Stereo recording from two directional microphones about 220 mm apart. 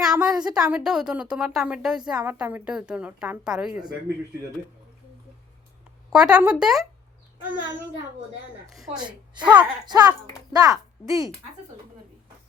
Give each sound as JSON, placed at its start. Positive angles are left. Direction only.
{"t": 0.0, "sound": "a woman's voice", "side_deg": -5}
{"t": 6.1, "sound": "a woman's voice", "side_deg": -5}
{"t": 8.7, "sound": "a woman's voice", "side_deg": 0}
{"t": 9.8, "sound": "a child's voice", "side_deg": -20}